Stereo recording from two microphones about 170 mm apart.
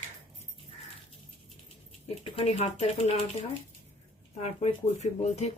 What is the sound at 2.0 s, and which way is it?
Speech, 35° left (ahead or behind).